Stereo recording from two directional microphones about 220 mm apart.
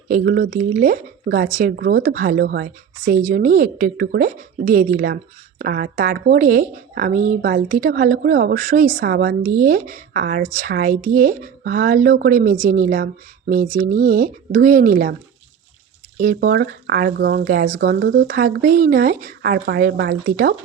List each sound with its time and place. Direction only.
0.1 s a woman's voice: 40° right (ahead or behind)
16.1 s speech: 40° right (ahead or behind)